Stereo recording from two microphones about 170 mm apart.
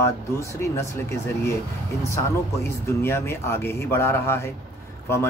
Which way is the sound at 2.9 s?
15° left (ahead or behind).